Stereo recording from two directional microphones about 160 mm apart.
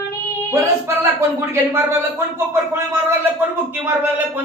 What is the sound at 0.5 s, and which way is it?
Speech, 15° right (ahead or behind).